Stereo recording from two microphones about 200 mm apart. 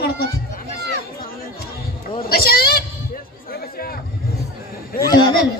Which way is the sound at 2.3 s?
50° left (ahead or behind).